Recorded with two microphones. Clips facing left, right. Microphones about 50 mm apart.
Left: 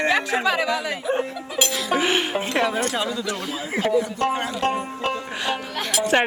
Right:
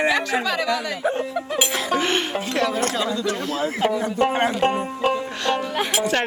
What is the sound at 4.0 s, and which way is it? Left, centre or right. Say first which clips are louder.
Speech: right 2 dB; right.